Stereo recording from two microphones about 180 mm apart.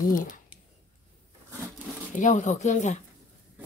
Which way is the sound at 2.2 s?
40° left (ahead or behind).